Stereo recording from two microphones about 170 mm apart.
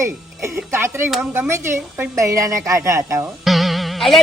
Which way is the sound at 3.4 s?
Centre (ahead or behind).